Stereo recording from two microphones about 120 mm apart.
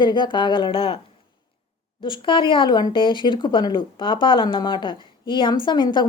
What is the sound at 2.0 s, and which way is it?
Speech, 45° left (ahead or behind).